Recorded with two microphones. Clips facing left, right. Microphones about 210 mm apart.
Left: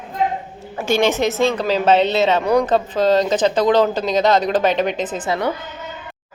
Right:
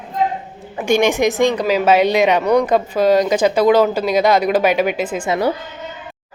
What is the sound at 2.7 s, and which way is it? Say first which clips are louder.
A woman's voice: right 2 dB; 10° right (ahead or behind).